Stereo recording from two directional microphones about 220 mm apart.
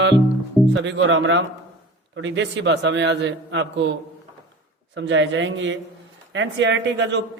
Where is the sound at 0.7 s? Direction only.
55° right (ahead or behind).